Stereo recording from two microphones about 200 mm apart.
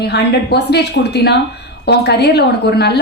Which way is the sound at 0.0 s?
55° left (ahead or behind).